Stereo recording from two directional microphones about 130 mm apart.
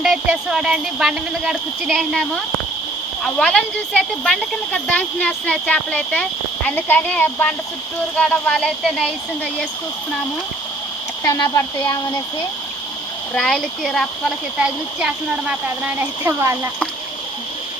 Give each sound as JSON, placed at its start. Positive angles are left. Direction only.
{"t": 0.0, "sound": "speech", "side_deg": -5}
{"t": 11.2, "sound": "speech", "side_deg": 25}
{"t": 13.3, "sound": "speech", "side_deg": 5}